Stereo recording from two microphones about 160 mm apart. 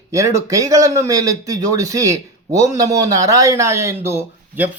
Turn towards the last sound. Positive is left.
turn(degrees=-15)  # may be behind; listen again after turning